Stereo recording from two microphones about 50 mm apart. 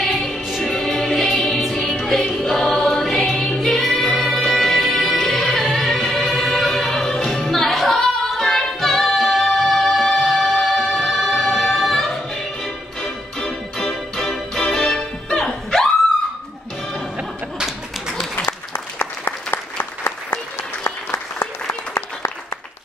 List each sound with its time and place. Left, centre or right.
0.7 s music: centre
7.5 s singing: centre
13.7 s music: centre
17.6 s tap: centre
18.9 s applause: left